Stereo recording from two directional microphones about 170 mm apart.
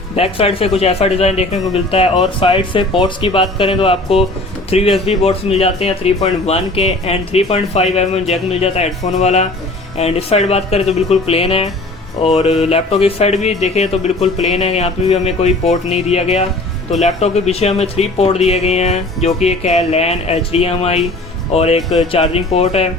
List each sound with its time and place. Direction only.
0.2 s speech: 35° left (ahead or behind)
21.8 s speech: centre (ahead or behind)
22.1 s speech: 35° left (ahead or behind)